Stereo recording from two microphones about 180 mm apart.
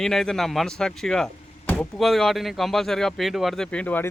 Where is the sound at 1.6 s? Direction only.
10° left (ahead or behind).